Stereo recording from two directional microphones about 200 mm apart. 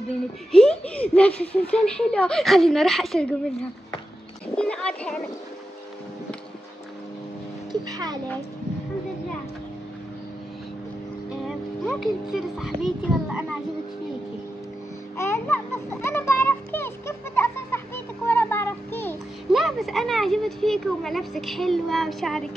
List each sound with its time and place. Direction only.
0.5 s speech: 5° left (ahead or behind)
4.6 s speech: 5° left (ahead or behind)
7.9 s a child's voice: 20° right (ahead or behind)
11.4 s a child's voice: centre (ahead or behind)
15.1 s a sound: 15° left (ahead or behind)
19.5 s speech: centre (ahead or behind)